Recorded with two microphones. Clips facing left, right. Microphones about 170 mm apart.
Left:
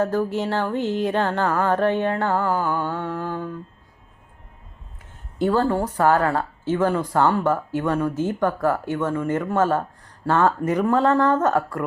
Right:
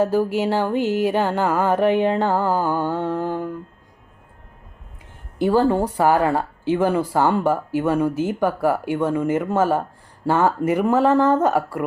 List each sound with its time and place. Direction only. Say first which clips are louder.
0.0 s speech: right 3 dB; 10° right (ahead or behind)
2.9 s music: right 4 dB; 20° right (ahead or behind)
5.4 s speech: right 3 dB; 10° right (ahead or behind)